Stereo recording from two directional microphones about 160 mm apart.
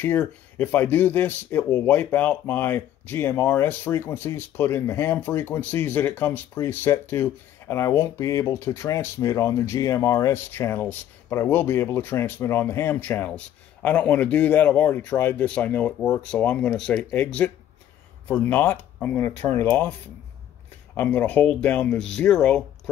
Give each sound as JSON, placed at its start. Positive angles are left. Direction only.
{"t": 0.0, "sound": "speech", "side_deg": 10}
{"t": 20.9, "sound": "speech", "side_deg": 10}